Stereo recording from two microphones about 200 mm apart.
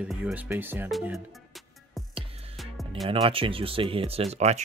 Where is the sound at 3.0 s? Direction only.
25° right (ahead or behind).